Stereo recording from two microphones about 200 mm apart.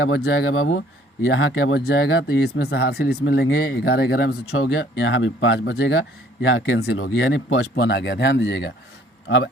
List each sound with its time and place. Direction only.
0.0 s speech: 70° left (ahead or behind)